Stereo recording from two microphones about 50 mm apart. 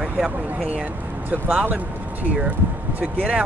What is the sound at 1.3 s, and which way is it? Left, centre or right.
Speech, right.